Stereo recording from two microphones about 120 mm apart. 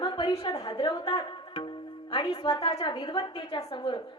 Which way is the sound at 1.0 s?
50° left (ahead or behind).